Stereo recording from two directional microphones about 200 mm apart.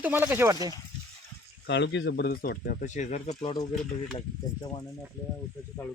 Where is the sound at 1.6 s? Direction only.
60° left (ahead or behind).